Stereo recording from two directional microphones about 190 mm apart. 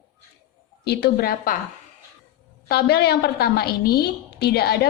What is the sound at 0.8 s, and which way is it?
Speech, 55° left (ahead or behind).